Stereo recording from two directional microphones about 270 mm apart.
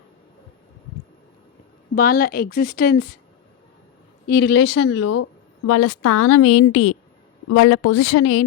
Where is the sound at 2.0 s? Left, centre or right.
Left.